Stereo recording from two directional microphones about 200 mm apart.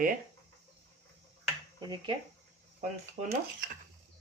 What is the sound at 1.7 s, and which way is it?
Speech, 20° right (ahead or behind).